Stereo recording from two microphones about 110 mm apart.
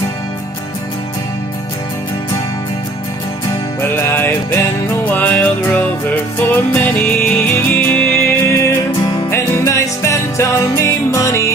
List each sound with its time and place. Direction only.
3.9 s music: 20° left (ahead or behind)